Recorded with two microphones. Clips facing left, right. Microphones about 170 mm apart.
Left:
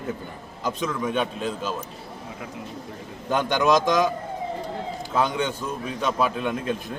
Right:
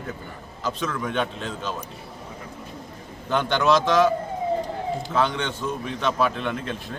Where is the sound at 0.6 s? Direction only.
15° left (ahead or behind).